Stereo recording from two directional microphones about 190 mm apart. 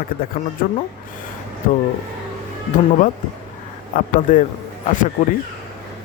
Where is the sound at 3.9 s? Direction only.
45° left (ahead or behind).